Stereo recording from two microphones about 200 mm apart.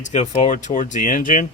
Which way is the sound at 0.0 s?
35° left (ahead or behind).